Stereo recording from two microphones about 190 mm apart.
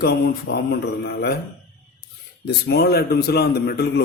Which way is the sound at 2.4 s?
55° left (ahead or behind).